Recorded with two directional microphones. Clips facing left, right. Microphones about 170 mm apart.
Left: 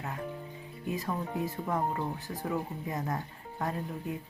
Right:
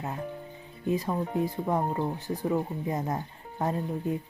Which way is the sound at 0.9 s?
25° right (ahead or behind).